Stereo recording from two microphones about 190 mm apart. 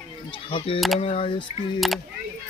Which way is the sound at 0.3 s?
25° left (ahead or behind).